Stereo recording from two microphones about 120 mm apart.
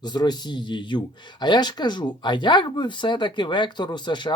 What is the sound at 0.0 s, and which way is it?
Speech, 35° left (ahead or behind).